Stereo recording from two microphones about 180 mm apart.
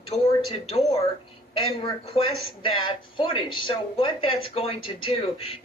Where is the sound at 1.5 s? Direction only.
30° left (ahead or behind).